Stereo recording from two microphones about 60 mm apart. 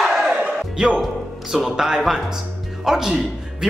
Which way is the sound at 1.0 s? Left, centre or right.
Centre.